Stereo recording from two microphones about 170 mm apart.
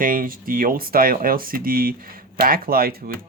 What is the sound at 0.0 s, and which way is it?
Speech, 55° right (ahead or behind).